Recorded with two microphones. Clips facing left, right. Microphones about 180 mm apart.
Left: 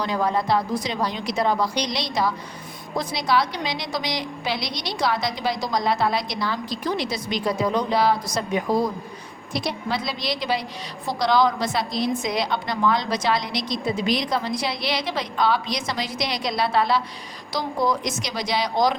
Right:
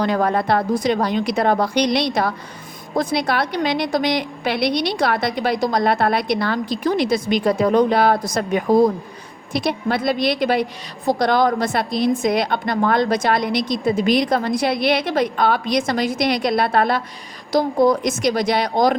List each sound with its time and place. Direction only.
0.0 s a woman's voice: 60° right (ahead or behind)